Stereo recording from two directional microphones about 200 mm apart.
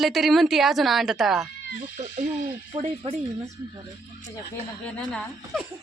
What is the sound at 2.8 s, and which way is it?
Speech, 35° right (ahead or behind).